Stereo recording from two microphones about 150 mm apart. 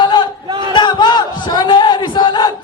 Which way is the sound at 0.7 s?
30° left (ahead or behind).